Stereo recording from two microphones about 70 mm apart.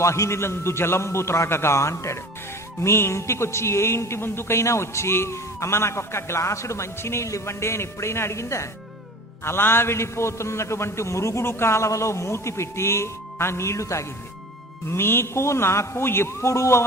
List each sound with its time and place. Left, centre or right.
0.0 s a man's voice: left
14.8 s a man's voice: left